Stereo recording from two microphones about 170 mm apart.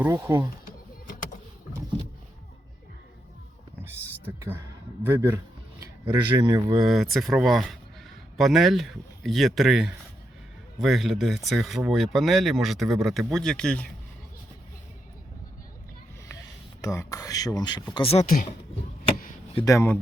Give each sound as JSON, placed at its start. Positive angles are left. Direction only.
{"t": 0.0, "sound": "speech", "side_deg": -15}
{"t": 0.6, "sound": "a sound", "side_deg": 55}
{"t": 4.3, "sound": "speech", "side_deg": -15}
{"t": 6.8, "sound": "speech", "side_deg": 0}
{"t": 16.8, "sound": "speech", "side_deg": 20}
{"t": 19.5, "sound": "speech", "side_deg": 20}